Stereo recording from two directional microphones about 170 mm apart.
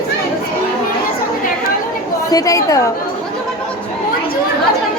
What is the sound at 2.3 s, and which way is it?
Speech, 20° left (ahead or behind).